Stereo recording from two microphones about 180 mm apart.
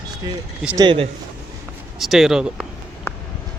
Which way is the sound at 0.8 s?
30° right (ahead or behind).